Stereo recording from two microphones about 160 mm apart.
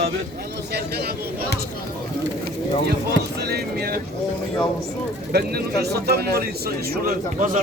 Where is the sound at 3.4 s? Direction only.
80° right.